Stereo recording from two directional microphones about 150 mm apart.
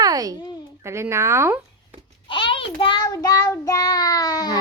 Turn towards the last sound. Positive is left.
turn(degrees=25)  # may be behind; listen again after turning